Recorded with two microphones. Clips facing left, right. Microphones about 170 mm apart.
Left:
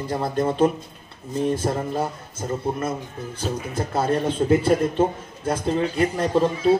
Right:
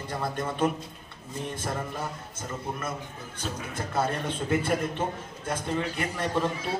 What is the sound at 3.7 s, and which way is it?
A man's voice, 30° left (ahead or behind).